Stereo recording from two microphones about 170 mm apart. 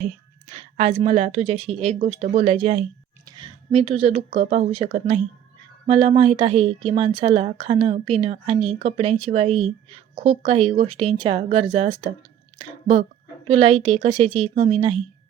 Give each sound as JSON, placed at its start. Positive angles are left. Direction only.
{"t": 0.5, "sound": "speech", "side_deg": -35}
{"t": 3.2, "sound": "a sound", "side_deg": -25}
{"t": 3.7, "sound": "speech", "side_deg": -40}
{"t": 13.5, "sound": "speech", "side_deg": -35}